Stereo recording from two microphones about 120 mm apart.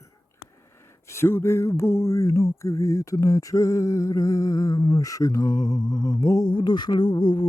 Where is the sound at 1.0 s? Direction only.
20° left (ahead or behind).